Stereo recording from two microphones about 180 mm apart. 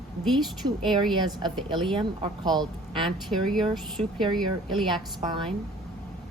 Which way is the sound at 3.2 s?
Centre (ahead or behind).